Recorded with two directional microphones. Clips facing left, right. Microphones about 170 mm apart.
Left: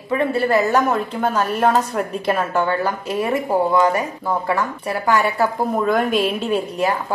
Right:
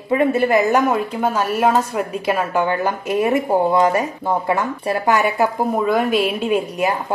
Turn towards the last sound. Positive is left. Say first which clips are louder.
# even
turn(degrees=-15)  # may be behind; listen again after turning